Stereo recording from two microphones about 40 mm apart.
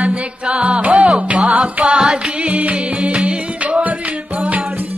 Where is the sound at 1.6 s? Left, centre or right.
Right.